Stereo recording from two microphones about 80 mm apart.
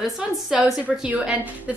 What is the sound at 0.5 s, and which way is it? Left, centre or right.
Speech, centre.